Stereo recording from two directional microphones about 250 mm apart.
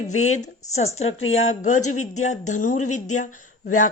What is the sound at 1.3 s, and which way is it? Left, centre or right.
Speech, left.